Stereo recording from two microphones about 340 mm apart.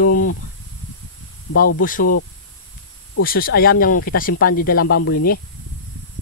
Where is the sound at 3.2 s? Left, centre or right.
Left.